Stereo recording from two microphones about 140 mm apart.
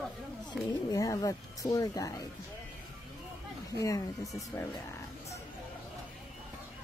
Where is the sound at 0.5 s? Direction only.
25° left (ahead or behind).